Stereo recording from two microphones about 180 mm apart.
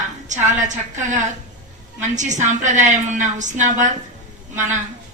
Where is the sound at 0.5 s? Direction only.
45° right (ahead or behind).